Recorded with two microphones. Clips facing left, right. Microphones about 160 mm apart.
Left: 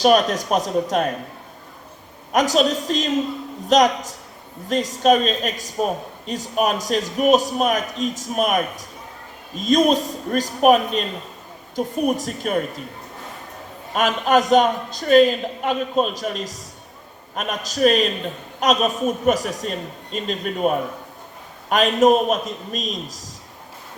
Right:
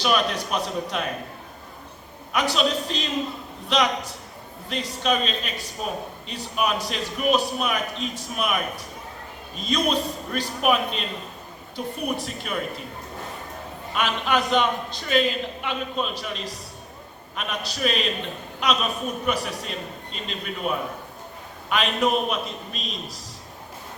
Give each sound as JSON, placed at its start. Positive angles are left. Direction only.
{"t": 0.0, "sound": "speech", "side_deg": 45}
{"t": 2.3, "sound": "speech", "side_deg": 45}
{"t": 13.9, "sound": "speech", "side_deg": 45}